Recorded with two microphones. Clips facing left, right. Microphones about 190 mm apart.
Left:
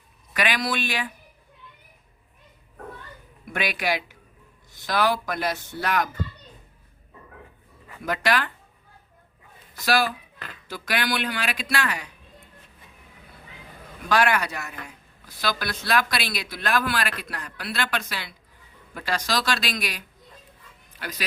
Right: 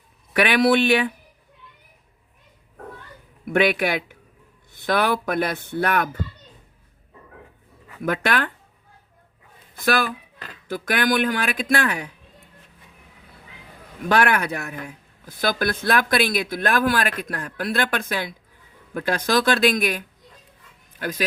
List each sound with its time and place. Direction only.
0.5 s speech: 65° right (ahead or behind)
3.4 s a man's voice: 60° right (ahead or behind)
8.0 s speech: 55° right (ahead or behind)
9.7 s speech: 55° right (ahead or behind)
14.1 s speech: 55° right (ahead or behind)